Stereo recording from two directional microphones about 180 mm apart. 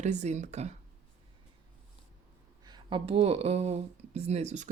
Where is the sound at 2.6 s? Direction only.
25° right (ahead or behind).